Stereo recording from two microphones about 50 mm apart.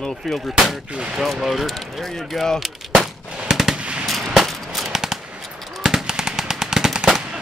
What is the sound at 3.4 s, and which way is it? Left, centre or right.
Machine gun, centre.